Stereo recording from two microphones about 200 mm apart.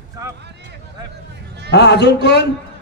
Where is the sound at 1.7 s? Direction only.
60° left (ahead or behind).